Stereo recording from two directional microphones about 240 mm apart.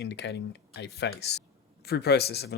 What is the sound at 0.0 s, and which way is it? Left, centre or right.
Speech, left.